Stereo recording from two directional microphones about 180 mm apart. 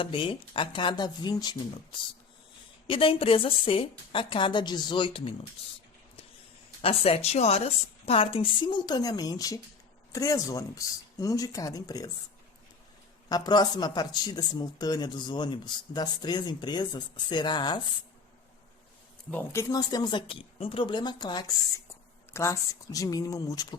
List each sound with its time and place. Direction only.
0.0 s speech: 30° left (ahead or behind)
6.8 s a woman's voice: 35° left (ahead or behind)
13.2 s speech: 25° left (ahead or behind)
19.3 s speech: 20° left (ahead or behind)